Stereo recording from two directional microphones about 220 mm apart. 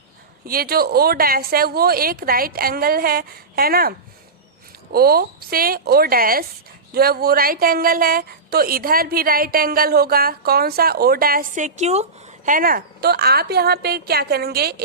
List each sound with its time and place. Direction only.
0.4 s a woman's voice: 40° right (ahead or behind)